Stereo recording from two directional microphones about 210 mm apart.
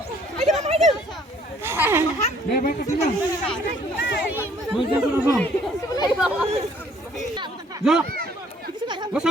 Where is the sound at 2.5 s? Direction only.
45° left (ahead or behind).